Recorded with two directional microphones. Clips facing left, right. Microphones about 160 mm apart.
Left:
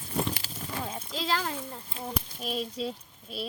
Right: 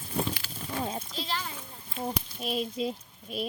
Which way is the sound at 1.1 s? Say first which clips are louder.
Left 5 dB; 90° left.